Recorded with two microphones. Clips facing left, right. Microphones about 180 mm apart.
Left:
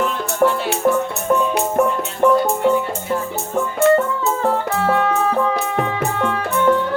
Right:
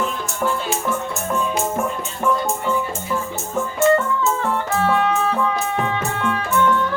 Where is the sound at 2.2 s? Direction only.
65° left (ahead or behind).